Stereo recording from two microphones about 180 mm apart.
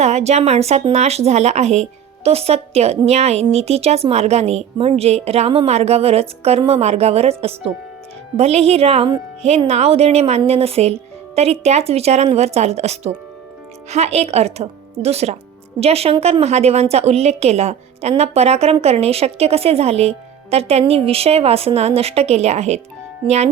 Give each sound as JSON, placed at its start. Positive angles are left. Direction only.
{"t": 0.0, "sound": "a woman's voice", "side_deg": -35}